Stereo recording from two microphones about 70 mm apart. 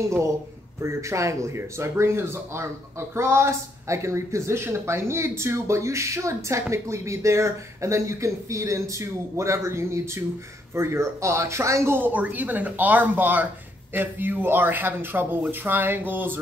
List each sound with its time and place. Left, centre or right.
0.0 s a man's voice: right